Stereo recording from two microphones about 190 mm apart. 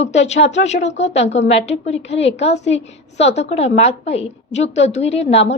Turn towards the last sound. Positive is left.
turn(degrees=35)  # may be behind; listen again after turning